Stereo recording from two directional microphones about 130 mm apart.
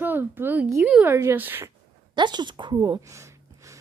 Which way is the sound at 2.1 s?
35° right (ahead or behind).